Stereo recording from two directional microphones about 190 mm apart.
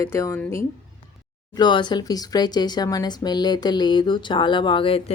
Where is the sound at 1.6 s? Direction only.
25° left (ahead or behind).